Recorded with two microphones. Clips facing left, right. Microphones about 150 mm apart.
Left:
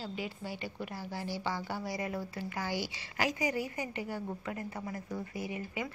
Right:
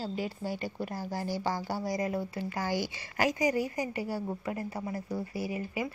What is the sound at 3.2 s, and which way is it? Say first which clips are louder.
A woman's voice: right 5 dB; 40° right (ahead or behind).